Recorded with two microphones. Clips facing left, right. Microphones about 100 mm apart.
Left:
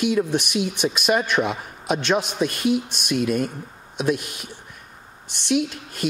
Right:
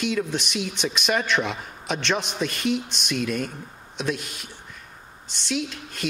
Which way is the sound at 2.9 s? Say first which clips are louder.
Left 4 dB; 50° left (ahead or behind).